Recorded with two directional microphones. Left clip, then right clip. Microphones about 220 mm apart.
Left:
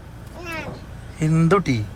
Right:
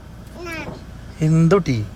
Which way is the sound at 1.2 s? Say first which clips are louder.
Right 2 dB; 10° right (ahead or behind).